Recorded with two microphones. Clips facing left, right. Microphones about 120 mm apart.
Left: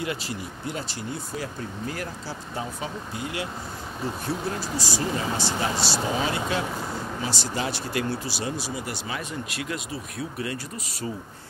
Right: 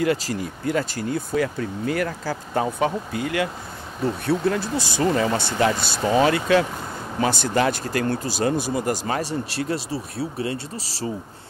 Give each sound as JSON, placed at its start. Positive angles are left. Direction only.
{"t": 0.0, "sound": "speech", "side_deg": -50}
{"t": 2.5, "sound": "speech", "side_deg": -75}
{"t": 7.2, "sound": "speech", "side_deg": -55}
{"t": 7.8, "sound": "speech", "side_deg": -45}
{"t": 9.2, "sound": "speech", "side_deg": -35}